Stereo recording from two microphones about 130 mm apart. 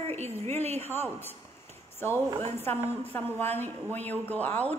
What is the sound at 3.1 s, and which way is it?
Speech, 15° left (ahead or behind).